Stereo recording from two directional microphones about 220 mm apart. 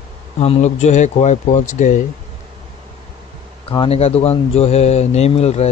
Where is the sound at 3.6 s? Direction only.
25° left (ahead or behind).